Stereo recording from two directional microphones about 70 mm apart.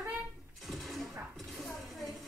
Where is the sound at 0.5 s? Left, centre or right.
Centre.